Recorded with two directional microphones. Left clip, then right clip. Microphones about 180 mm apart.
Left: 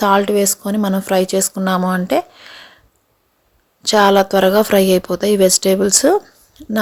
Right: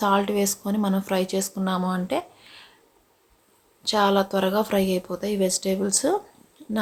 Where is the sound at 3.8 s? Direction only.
45° left (ahead or behind).